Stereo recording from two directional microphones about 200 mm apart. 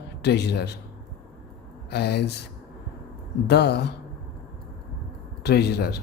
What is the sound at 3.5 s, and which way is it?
Speech, 55° left (ahead or behind).